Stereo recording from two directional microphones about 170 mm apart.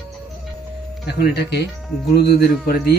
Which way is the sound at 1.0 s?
75° left (ahead or behind).